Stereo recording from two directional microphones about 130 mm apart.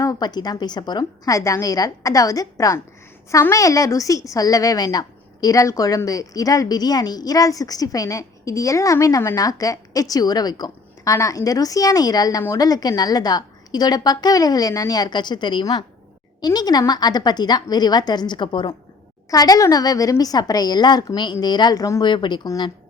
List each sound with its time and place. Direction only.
0.0 s a woman's voice: 30° left (ahead or behind)
22.1 s a woman's voice: 35° left (ahead or behind)